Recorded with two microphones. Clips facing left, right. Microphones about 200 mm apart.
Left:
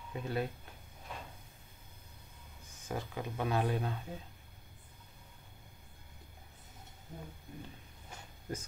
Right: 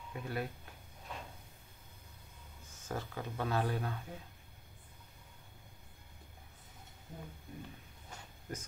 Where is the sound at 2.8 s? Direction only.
15° left (ahead or behind).